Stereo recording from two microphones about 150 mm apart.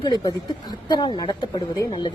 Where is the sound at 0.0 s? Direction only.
30° left (ahead or behind).